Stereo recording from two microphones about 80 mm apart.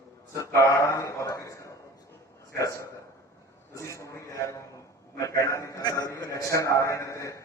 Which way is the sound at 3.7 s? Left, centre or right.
Left.